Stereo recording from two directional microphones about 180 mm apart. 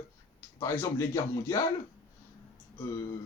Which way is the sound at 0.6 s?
15° left (ahead or behind).